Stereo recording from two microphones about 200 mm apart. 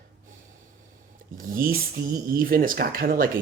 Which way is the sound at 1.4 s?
45° right (ahead or behind).